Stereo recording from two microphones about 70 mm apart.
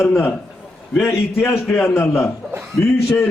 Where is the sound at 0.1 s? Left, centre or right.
Left.